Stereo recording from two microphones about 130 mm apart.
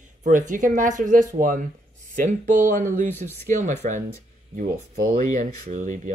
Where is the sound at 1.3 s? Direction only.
90° right.